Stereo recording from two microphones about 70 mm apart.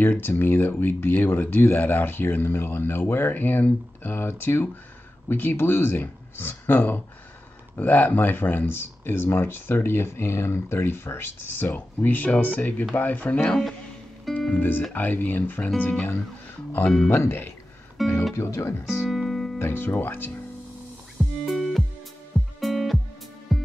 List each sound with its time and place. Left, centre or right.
0.0 s speech: left
14.3 s speech: centre
14.6 s speech: left
17.2 s speech: left
18.0 s speech: centre
18.4 s speech: left
18.9 s music: centre
19.6 s speech: left
21.5 s music: centre